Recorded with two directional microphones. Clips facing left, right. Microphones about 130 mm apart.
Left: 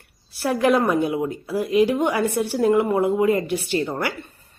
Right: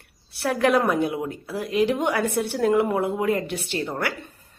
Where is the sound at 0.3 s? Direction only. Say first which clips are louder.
Left 2 dB; centre (ahead or behind).